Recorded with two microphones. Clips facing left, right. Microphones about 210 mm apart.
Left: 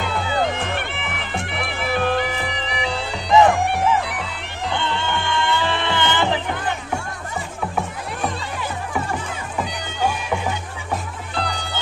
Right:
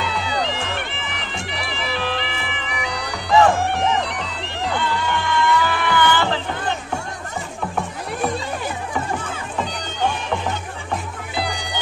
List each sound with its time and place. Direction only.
0.0 s bagpipes: 50° left (ahead or behind); by 4.3 s 5° left (ahead or behind)
4.7 s music: 25° left (ahead or behind)
9.6 s music: 10° left (ahead or behind)
11.3 s music: 10° right (ahead or behind)